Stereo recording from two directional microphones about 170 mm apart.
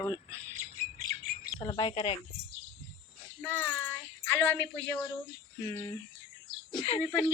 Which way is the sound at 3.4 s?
10° left (ahead or behind).